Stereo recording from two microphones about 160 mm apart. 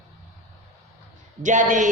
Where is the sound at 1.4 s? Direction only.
50° right (ahead or behind).